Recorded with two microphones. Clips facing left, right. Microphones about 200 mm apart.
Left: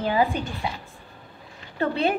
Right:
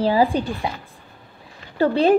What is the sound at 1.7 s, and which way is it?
Speech, 35° right (ahead or behind).